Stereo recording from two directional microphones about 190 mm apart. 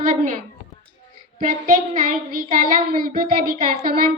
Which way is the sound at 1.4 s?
45° right (ahead or behind).